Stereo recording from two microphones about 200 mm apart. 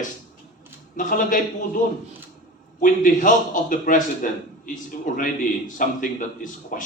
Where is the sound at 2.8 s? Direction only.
40° left (ahead or behind).